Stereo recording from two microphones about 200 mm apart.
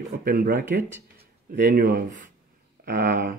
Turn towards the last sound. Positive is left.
turn(degrees=-45)  # may be behind; listen again after turning